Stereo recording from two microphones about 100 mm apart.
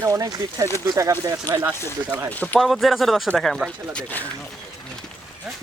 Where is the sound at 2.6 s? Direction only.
Centre (ahead or behind).